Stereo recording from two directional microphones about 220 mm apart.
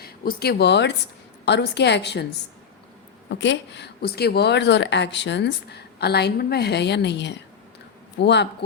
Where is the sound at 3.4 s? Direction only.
55° left (ahead or behind).